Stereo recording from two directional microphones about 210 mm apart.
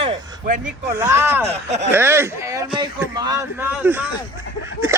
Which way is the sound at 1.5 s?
30° right (ahead or behind).